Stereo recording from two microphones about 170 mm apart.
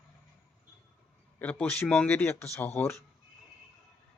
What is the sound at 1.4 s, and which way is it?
Speech, 10° left (ahead or behind).